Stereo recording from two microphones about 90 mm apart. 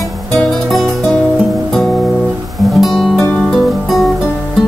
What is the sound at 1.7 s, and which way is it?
Guitar, 5° left (ahead or behind).